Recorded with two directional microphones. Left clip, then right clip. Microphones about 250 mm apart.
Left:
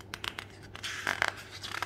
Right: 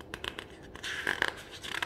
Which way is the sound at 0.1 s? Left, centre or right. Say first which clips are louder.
Left 1 dB; left.